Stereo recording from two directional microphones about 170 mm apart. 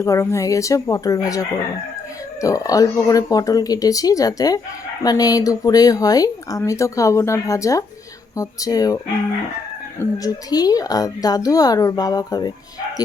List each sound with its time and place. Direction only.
0.0 s speech: 15° left (ahead or behind)
10.0 s speech: 20° left (ahead or behind)